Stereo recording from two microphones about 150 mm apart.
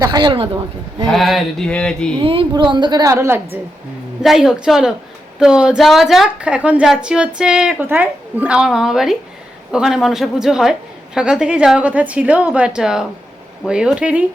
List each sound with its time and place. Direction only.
0.0 s speech: 30° right (ahead or behind)
1.0 s a woman's voice: centre (ahead or behind)
2.2 s a woman's voice: 35° right (ahead or behind); by 3.6 s 15° right (ahead or behind)
4.2 s a woman's voice: centre (ahead or behind)